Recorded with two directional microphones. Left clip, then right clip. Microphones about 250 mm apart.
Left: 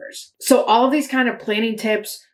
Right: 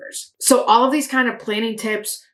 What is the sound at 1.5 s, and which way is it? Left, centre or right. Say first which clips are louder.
Speech: left 2 dB; centre.